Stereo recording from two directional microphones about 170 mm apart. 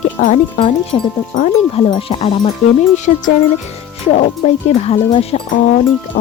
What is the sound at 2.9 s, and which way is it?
Speech, 45° left (ahead or behind).